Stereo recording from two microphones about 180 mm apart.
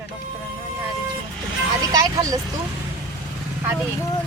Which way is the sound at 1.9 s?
20° right (ahead or behind).